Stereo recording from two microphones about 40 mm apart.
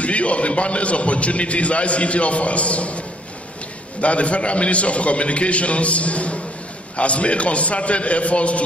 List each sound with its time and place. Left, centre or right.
0.0 s a man's voice: left
4.0 s a man's voice: left